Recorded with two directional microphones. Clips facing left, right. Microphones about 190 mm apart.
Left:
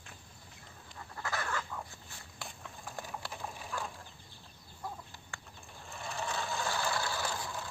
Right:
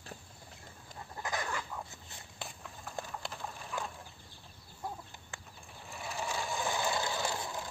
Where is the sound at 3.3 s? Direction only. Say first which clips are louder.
Left 1 dB; 5° left (ahead or behind).